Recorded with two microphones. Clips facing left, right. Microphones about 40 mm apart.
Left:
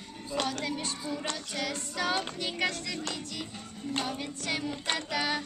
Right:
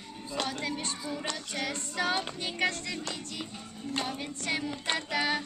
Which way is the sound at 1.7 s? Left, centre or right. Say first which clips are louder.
Right 1 dB; centre.